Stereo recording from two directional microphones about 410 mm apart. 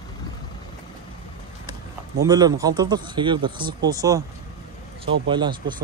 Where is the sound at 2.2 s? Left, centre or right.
Centre.